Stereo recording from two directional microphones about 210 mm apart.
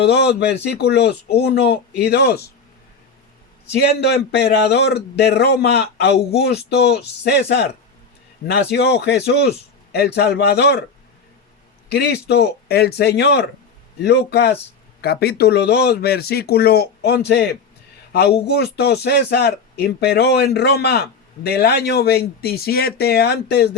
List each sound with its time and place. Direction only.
0.0 s speech: 55° left (ahead or behind)
3.7 s speech: 50° left (ahead or behind)
11.9 s speech: 50° left (ahead or behind)